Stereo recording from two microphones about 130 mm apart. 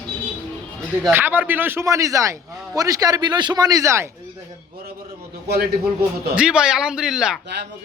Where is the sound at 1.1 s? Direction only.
15° right (ahead or behind).